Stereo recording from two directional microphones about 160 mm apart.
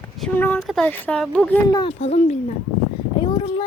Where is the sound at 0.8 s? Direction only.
10° left (ahead or behind).